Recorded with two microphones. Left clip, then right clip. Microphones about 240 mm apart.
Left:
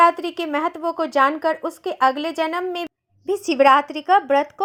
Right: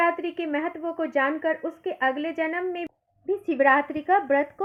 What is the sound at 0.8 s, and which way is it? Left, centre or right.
Speech, left.